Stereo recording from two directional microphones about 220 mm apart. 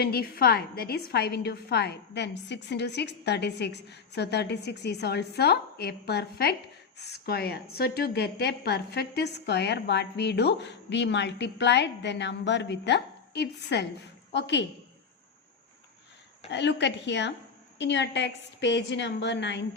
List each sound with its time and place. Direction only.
0.0 s a woman's voice: 45° left (ahead or behind)
16.5 s a woman's voice: 50° left (ahead or behind)